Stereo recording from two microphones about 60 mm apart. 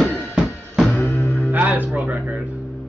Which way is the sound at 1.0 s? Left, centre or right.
Left.